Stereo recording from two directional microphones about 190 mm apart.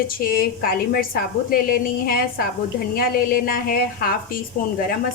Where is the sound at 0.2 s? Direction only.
50° left (ahead or behind).